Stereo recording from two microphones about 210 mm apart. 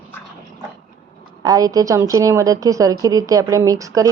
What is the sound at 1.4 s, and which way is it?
A woman's voice, 15° right (ahead or behind).